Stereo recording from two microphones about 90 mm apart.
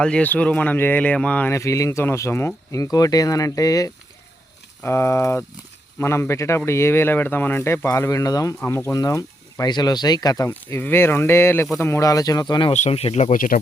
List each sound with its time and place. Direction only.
0.0 s speech: 15° left (ahead or behind)
1.5 s speech: 35° left (ahead or behind)
2.8 s speech: 45° left (ahead or behind)
4.8 s speech: 25° left (ahead or behind); by 10.4 s 45° left (ahead or behind)
10.4 s speech: 30° left (ahead or behind); by 13.1 s 80° left